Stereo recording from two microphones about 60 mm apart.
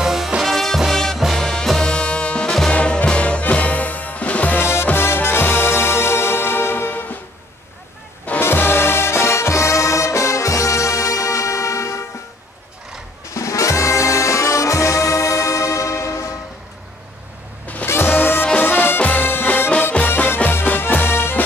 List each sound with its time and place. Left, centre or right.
0.0 s music: centre; by 4.6 s left
4.6 s music: left
8.4 s music: left
13.3 s brass instrument: left
17.8 s music: left